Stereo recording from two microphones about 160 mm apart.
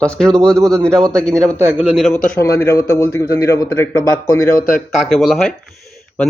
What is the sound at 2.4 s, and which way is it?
A man's voice, 20° left (ahead or behind).